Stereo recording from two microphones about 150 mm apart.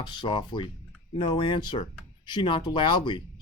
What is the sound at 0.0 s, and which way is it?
Speech, 30° left (ahead or behind).